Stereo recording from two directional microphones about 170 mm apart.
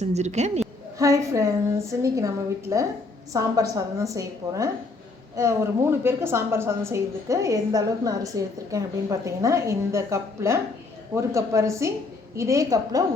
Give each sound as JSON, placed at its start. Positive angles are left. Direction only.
{"t": 0.0, "sound": "a woman's voice", "side_deg": -40}
{"t": 0.9, "sound": "a woman's voice", "side_deg": -20}